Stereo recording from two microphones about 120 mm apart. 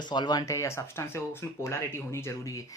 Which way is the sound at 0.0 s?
40° left (ahead or behind).